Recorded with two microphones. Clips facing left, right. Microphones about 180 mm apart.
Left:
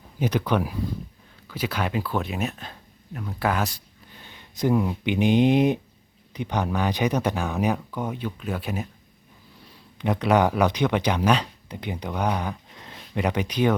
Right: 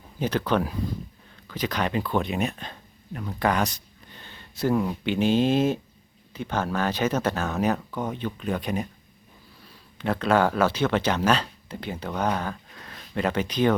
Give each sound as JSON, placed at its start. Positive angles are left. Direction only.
{"t": 0.2, "sound": "speech", "side_deg": 10}
{"t": 10.0, "sound": "speech", "side_deg": 15}